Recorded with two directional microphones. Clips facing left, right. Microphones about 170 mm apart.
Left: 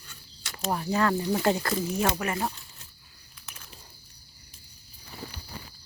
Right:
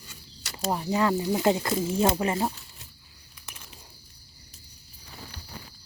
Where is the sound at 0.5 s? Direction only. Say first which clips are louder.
Right 1 dB; 15° right (ahead or behind).